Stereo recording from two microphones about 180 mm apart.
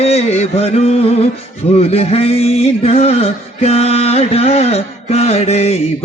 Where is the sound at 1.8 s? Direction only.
35° left (ahead or behind).